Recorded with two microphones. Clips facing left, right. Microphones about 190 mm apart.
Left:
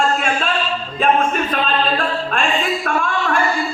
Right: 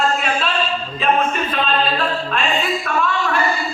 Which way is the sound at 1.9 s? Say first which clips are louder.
Left 1 dB; 50° left (ahead or behind).